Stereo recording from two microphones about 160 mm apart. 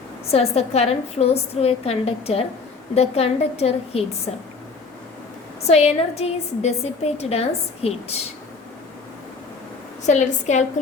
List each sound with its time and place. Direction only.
0.3 s a woman's voice: 40° left (ahead or behind)
5.6 s a woman's voice: 40° left (ahead or behind)
10.0 s a woman's voice: 50° left (ahead or behind)